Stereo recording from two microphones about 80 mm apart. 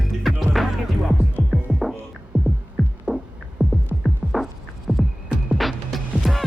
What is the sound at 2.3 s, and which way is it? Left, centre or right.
Music, centre.